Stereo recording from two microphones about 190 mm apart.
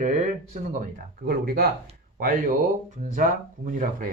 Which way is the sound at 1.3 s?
50° right (ahead or behind).